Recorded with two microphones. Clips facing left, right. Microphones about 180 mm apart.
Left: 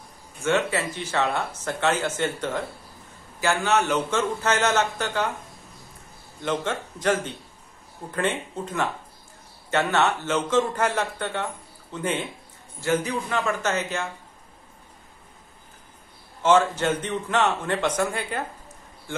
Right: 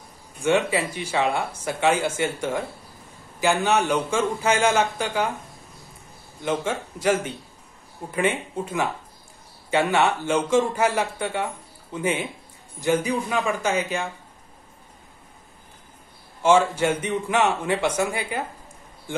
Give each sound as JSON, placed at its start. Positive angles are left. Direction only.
{"t": 0.4, "sound": "speech", "side_deg": -15}
{"t": 6.4, "sound": "speech", "side_deg": -10}
{"t": 16.4, "sound": "speech", "side_deg": -10}